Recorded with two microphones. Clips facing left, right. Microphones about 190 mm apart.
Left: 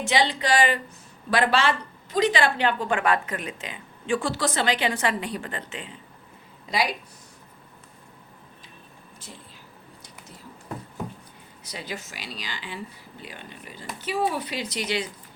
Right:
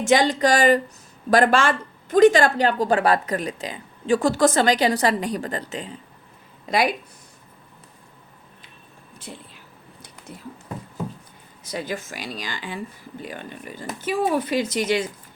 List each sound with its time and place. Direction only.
0.0 s speech: 45° right (ahead or behind)
6.7 s speech: 50° right (ahead or behind)
9.3 s speech: 75° right (ahead or behind)
11.6 s speech: 50° right (ahead or behind)